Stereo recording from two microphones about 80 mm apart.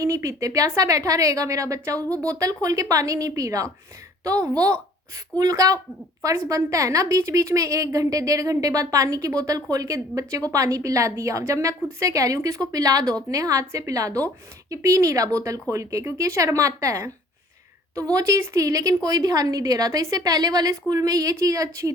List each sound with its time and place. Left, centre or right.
0.0 s a woman's voice: right
18.1 s a woman's voice: right